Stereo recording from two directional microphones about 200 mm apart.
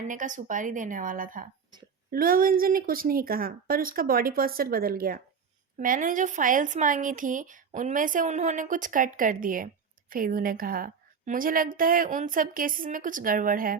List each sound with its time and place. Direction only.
0.1 s a woman's voice: 40° right (ahead or behind)